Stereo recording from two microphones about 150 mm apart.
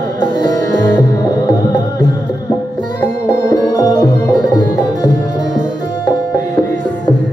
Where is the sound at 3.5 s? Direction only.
25° left (ahead or behind).